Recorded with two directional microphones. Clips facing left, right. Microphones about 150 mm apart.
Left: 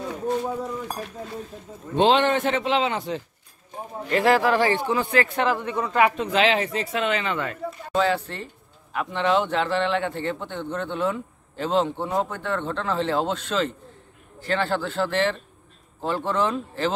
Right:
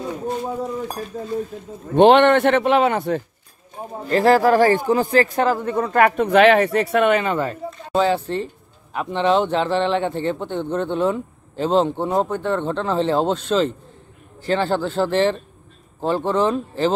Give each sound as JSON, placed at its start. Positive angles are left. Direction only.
{"t": 2.0, "sound": "speech", "side_deg": -60}
{"t": 4.1, "sound": "a man's voice", "side_deg": -40}